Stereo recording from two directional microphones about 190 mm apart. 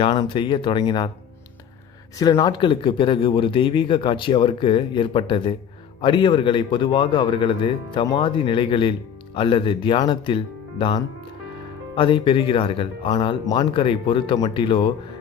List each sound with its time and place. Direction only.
0.0 s speech: 25° left (ahead or behind)
2.1 s speech: 20° left (ahead or behind)